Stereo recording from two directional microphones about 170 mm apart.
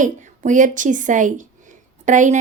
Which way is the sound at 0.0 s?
50° right (ahead or behind).